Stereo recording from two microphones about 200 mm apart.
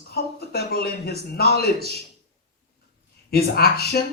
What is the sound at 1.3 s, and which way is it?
Speech, 50° left (ahead or behind).